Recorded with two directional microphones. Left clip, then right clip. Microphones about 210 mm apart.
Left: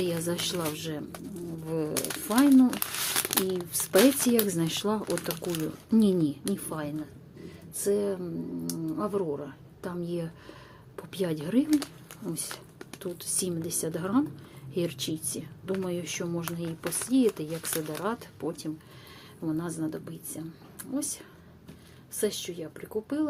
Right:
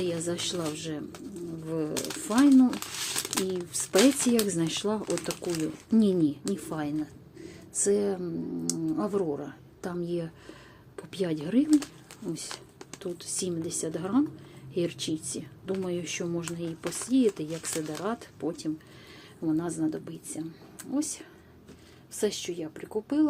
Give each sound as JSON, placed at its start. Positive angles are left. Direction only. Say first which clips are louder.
{"t": 0.0, "sound": "speech", "louder": "left 1 dB", "side_deg": 5}
{"t": 1.9, "sound": "speech", "louder": "left 1 dB", "side_deg": 15}
{"t": 2.2, "sound": "speech", "louder": "even", "side_deg": 0}
{"t": 2.6, "sound": "speech", "louder": "left 1 dB", "side_deg": 20}
{"t": 3.5, "sound": "speech", "louder": "left 1 dB", "side_deg": 0}